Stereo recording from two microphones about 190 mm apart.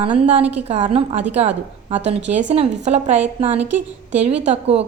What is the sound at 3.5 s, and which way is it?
Speech, 10° right (ahead or behind).